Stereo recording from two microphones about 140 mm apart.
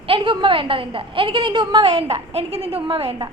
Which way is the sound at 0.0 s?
40° right (ahead or behind).